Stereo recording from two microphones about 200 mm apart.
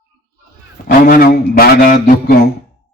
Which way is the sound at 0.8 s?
45° left (ahead or behind).